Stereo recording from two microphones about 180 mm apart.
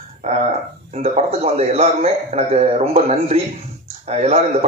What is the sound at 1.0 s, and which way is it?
A man's voice, 35° right (ahead or behind).